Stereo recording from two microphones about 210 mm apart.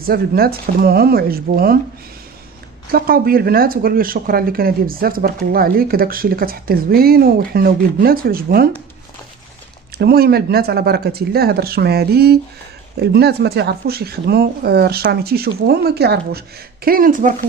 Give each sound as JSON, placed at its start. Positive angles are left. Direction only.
{"t": 0.0, "sound": "speech", "side_deg": -45}
{"t": 2.9, "sound": "speech", "side_deg": -45}
{"t": 10.0, "sound": "speech", "side_deg": -50}